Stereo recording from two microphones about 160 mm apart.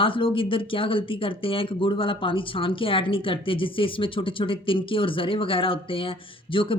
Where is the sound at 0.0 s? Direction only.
35° left (ahead or behind).